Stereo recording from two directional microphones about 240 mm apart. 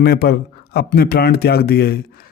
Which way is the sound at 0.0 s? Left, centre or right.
Left.